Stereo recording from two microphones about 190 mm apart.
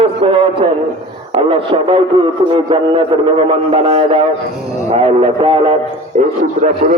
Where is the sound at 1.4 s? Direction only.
30° right (ahead or behind).